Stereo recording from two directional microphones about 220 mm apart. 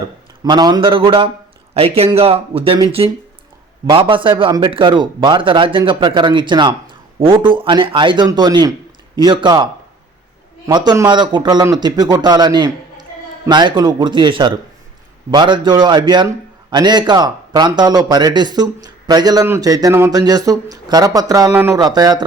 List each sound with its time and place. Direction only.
0.4 s speech: 20° right (ahead or behind)
10.7 s speech: 20° right (ahead or behind)